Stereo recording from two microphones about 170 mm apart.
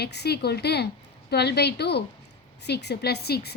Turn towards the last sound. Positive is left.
turn(degrees=70)  # may be behind; listen again after turning